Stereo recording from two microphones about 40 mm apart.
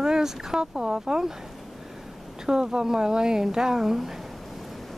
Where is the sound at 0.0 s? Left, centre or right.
Centre.